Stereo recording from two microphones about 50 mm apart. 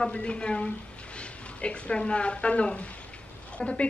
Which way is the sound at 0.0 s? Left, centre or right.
Left.